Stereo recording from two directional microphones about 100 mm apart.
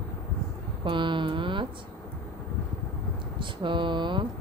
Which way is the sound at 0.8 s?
55° right (ahead or behind).